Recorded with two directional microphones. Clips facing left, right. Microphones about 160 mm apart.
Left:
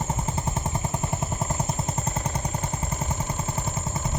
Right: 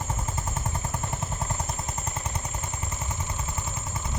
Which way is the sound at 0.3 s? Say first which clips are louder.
Left 4 dB; 25° left (ahead or behind).